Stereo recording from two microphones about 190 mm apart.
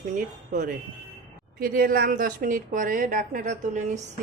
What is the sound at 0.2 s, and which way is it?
A woman's voice, 45° right (ahead or behind).